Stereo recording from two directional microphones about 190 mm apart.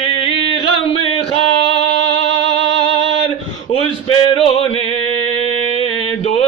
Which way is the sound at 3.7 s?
30° left (ahead or behind).